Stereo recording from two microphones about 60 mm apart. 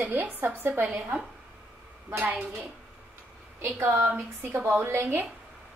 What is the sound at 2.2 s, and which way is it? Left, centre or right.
Speech, right.